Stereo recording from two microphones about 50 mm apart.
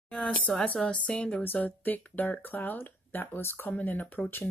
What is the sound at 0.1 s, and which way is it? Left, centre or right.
A woman's voice, centre.